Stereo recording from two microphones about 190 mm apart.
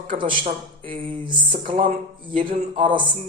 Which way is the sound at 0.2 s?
25° right (ahead or behind).